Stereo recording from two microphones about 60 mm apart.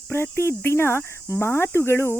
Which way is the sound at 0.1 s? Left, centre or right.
Left.